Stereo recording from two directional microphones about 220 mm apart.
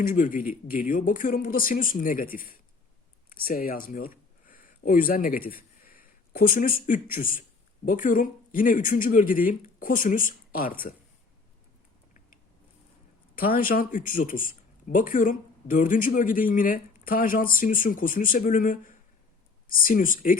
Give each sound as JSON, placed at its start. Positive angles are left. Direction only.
{"t": 0.0, "sound": "speech", "side_deg": 40}
{"t": 13.3, "sound": "speech", "side_deg": 40}